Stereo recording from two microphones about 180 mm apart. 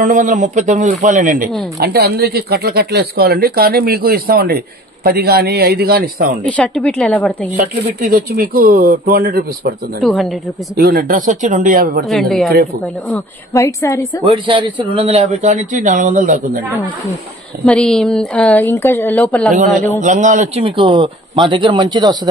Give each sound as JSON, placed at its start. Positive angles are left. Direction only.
{"t": 0.0, "sound": "a man's voice", "side_deg": -45}
{"t": 1.8, "sound": "speech", "side_deg": -60}
{"t": 6.4, "sound": "speech", "side_deg": 5}
{"t": 7.8, "sound": "speech", "side_deg": -50}
{"t": 10.0, "sound": "a man's voice", "side_deg": 0}
{"t": 10.8, "sound": "a man's voice", "side_deg": -55}
{"t": 12.1, "sound": "a man's voice", "side_deg": 0}
{"t": 13.1, "sound": "speech", "side_deg": 15}
{"t": 14.3, "sound": "speech", "side_deg": -30}
{"t": 17.6, "sound": "speech", "side_deg": 5}
{"t": 19.5, "sound": "a man's voice", "side_deg": -45}
{"t": 20.6, "sound": "speech", "side_deg": -25}